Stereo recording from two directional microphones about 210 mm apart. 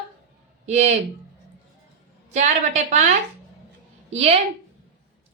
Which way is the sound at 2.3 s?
35° right (ahead or behind).